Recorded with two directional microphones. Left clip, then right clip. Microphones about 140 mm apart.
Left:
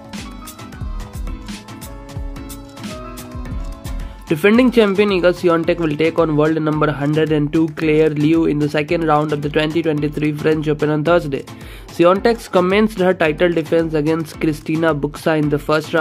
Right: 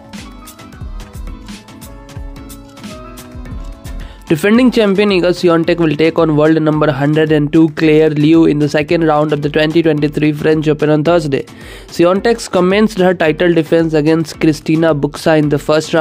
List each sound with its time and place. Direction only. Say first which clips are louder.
4.3 s speech: right 2 dB; 40° right (ahead or behind)